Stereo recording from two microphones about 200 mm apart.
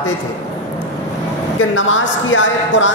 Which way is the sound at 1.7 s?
70° left (ahead or behind).